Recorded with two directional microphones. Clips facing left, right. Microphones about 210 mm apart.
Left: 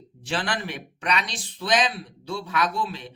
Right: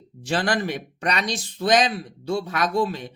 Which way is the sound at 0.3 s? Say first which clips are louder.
Right 5 dB; 45° right (ahead or behind).